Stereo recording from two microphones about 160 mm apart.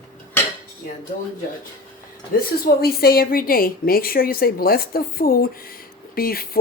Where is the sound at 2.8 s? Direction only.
70° left (ahead or behind).